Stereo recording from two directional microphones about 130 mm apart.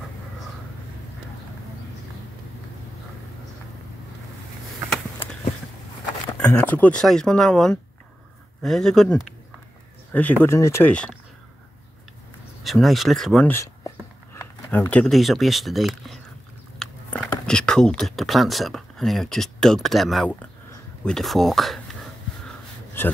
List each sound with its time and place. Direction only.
6.4 s speech: 10° left (ahead or behind)
12.6 s speech: centre (ahead or behind)
13.5 s a sound: 20° left (ahead or behind)
14.9 s speech: 5° left (ahead or behind)
23.0 s speech: 15° left (ahead or behind)